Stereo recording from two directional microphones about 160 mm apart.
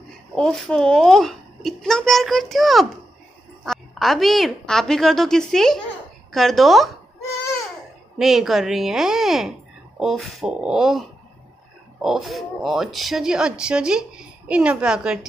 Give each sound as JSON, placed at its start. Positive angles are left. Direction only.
{"t": 0.3, "sound": "speech", "side_deg": 5}
{"t": 8.2, "sound": "a woman's voice", "side_deg": 0}